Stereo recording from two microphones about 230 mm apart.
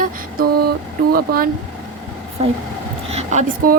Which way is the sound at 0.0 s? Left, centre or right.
Right.